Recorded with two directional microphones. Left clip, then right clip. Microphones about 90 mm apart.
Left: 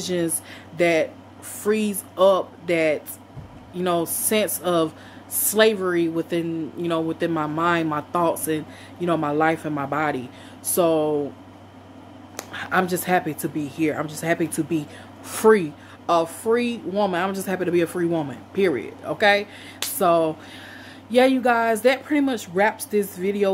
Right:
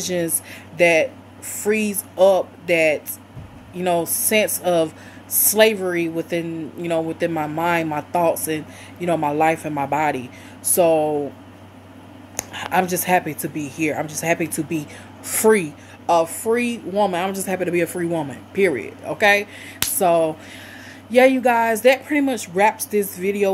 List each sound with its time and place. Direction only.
0.0 s speech: 25° left (ahead or behind)
12.4 s speech: 25° left (ahead or behind)